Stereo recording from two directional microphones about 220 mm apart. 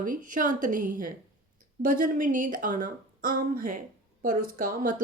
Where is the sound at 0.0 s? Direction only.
35° right (ahead or behind).